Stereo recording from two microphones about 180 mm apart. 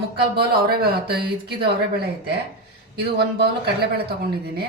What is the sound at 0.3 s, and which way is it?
A man's voice, 60° right (ahead or behind).